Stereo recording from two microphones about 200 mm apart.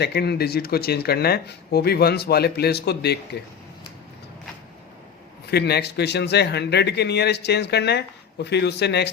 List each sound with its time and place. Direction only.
0.0 s speech: 55° left (ahead or behind)
5.5 s a man's voice: 55° left (ahead or behind)